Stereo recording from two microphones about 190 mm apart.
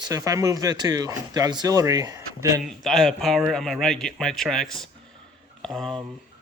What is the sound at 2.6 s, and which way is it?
Speech, centre (ahead or behind).